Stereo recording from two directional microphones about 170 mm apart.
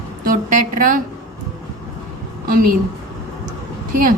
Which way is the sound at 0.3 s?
55° right (ahead or behind).